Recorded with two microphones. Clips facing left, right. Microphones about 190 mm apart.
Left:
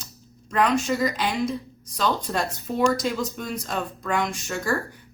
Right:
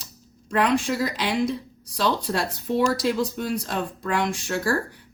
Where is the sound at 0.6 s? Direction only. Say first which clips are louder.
Left 1 dB; 75° right (ahead or behind).